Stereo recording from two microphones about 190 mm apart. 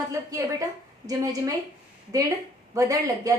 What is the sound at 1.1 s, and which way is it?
Speech, 20° right (ahead or behind).